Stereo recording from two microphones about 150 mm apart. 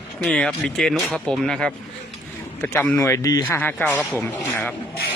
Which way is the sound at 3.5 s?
15° left (ahead or behind).